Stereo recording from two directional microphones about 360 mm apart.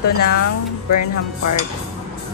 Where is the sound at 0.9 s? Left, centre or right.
Left.